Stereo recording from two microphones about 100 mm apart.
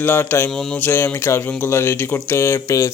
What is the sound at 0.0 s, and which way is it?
Speech, 20° left (ahead or behind).